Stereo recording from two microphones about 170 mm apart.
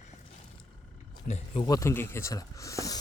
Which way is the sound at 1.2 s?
40° left (ahead or behind).